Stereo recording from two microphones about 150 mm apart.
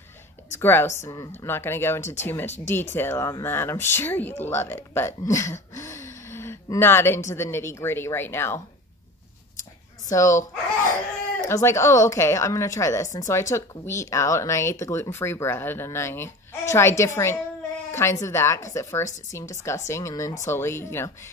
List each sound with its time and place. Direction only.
0.5 s a woman's voice: 15° left (ahead or behind)
10.0 s a woman's voice: 20° left (ahead or behind)
11.4 s a woman's voice: 20° left (ahead or behind)